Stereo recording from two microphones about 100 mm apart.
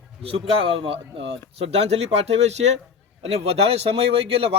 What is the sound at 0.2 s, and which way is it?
A man's voice, 70° right (ahead or behind).